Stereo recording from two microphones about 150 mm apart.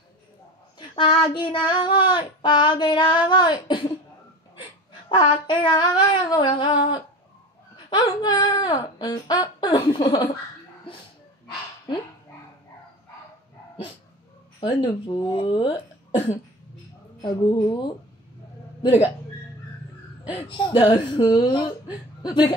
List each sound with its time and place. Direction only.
0.7 s child singing: 35° left (ahead or behind)
5.1 s child singing: 30° left (ahead or behind)
7.7 s speech: 25° left (ahead or behind)
9.8 s child singing: 40° left (ahead or behind)
14.6 s child singing: 30° left (ahead or behind)
17.2 s speech: 30° left (ahead or behind)
20.4 s child singing: 30° left (ahead or behind)